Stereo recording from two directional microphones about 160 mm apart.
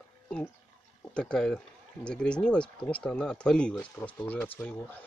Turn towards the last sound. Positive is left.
turn(degrees=10)  # may be behind; listen again after turning